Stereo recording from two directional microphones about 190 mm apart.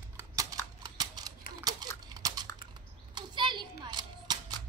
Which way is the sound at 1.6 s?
20° right (ahead or behind).